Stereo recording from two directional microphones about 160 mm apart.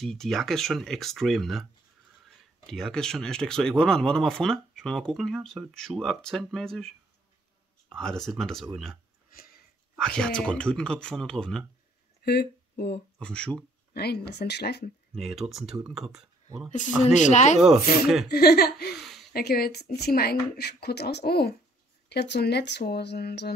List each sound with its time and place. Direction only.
0.0 s speech: centre (ahead or behind)
9.3 s sniff: 70° left (ahead or behind)
9.9 s speech: 5° left (ahead or behind)
12.2 s speech: 90° left
13.2 s speech: 5° left (ahead or behind)
13.9 s speech: 90° left
15.1 s speech: 5° right (ahead or behind)
17.0 s speech: 50° left (ahead or behind)
18.3 s speech: 80° left
18.9 s a sound: centre (ahead or behind)
19.3 s speech: 75° left (ahead or behind); by 23.5 s 90° left